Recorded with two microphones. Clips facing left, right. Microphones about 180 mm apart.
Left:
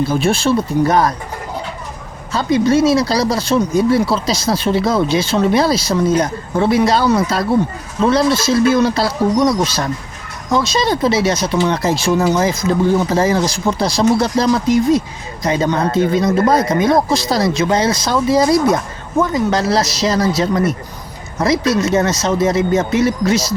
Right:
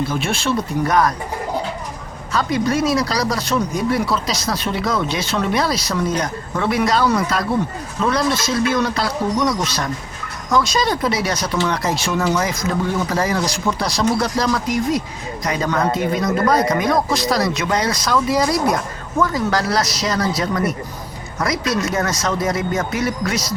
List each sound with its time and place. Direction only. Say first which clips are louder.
0.1 s speech: left 6 dB; 35° left (ahead or behind)
2.3 s speech: left 5 dB; 25° left (ahead or behind)